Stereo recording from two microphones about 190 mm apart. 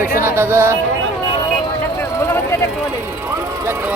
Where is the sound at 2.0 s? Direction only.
15° left (ahead or behind).